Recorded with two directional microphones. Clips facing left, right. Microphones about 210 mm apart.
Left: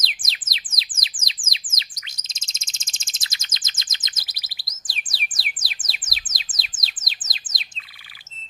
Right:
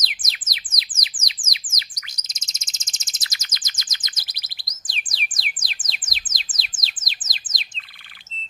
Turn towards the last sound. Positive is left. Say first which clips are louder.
# right 1 dB
turn(degrees=0)  # may be behind; listen again after turning